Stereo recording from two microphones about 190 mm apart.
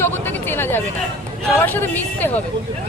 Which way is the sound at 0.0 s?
10° left (ahead or behind).